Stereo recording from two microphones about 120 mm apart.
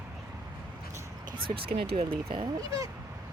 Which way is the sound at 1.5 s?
45° right (ahead or behind).